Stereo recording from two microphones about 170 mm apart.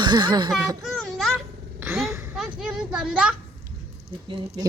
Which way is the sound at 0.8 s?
Centre (ahead or behind).